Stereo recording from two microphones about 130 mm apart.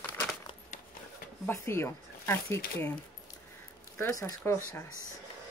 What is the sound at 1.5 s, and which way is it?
Speech, 20° left (ahead or behind).